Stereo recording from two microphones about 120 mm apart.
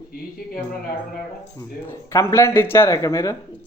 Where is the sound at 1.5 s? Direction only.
20° left (ahead or behind).